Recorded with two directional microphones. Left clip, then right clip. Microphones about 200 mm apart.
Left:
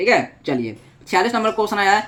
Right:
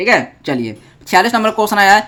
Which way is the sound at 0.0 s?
25° right (ahead or behind).